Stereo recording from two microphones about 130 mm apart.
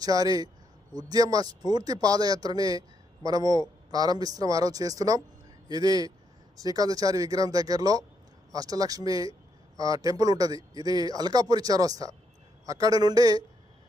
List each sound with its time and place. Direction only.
0.0 s speech: 30° right (ahead or behind)